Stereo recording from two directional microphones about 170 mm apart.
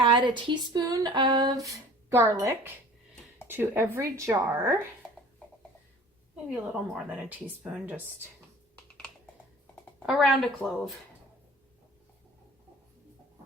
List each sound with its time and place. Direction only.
0.0 s a sound: 30° right (ahead or behind)
3.4 s speech: 15° right (ahead or behind)
6.5 s speech: 10° right (ahead or behind)
10.1 s speech: centre (ahead or behind)